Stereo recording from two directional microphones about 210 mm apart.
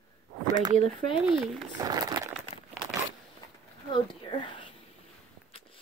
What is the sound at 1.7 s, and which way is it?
Speech, 20° right (ahead or behind).